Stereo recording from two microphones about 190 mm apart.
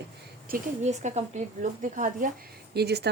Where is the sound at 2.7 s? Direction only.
60° right (ahead or behind).